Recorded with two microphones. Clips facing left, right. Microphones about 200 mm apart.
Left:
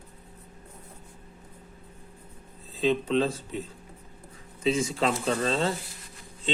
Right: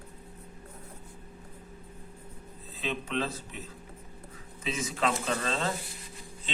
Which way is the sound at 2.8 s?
30° left (ahead or behind).